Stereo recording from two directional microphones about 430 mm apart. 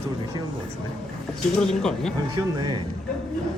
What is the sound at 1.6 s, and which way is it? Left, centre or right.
Speech, centre.